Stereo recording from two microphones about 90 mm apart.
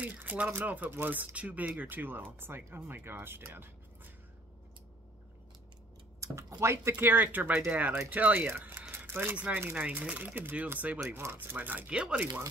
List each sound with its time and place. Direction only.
0.0 s speech: 15° right (ahead or behind)
6.2 s a sound: 35° right (ahead or behind)
6.6 s speech: 30° right (ahead or behind); by 12.3 s 10° right (ahead or behind)